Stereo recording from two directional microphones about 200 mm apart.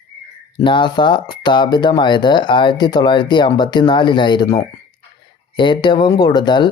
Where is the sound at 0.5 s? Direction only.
25° left (ahead or behind).